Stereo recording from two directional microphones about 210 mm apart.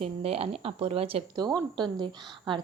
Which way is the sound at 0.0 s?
30° right (ahead or behind).